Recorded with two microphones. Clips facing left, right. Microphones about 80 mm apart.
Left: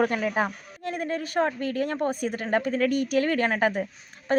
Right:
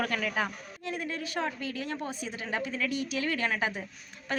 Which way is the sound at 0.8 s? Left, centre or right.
Left.